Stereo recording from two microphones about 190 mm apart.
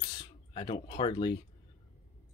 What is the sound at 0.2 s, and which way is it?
Speech, 25° left (ahead or behind).